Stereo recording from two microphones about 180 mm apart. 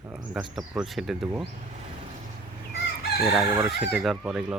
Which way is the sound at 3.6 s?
Centre (ahead or behind).